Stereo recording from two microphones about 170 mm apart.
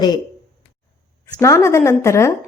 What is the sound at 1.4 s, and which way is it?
Speech, 15° left (ahead or behind).